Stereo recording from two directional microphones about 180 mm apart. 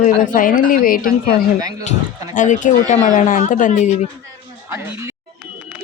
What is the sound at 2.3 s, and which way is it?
A woman's voice, 45° left (ahead or behind).